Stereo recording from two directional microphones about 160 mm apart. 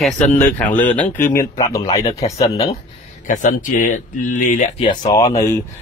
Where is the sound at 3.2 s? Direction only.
55° left (ahead or behind).